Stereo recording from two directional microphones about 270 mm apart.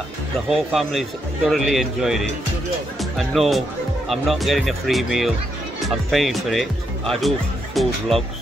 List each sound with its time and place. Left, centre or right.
0.5 s speech: centre